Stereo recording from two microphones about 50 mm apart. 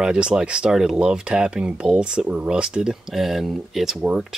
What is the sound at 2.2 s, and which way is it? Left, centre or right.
Speech, right.